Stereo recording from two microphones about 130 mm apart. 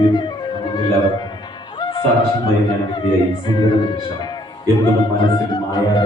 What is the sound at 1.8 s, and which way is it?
Music, 35° left (ahead or behind).